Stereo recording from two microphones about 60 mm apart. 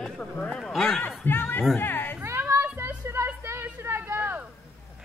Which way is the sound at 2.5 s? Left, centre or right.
Right.